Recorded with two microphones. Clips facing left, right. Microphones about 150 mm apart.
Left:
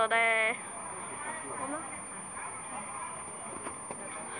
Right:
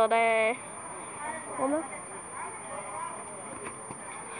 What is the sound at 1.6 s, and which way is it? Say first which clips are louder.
Speech: right 11 dB; 55° right (ahead or behind).